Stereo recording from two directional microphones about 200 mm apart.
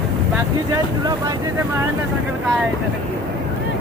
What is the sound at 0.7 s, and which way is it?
Speech, 20° right (ahead or behind).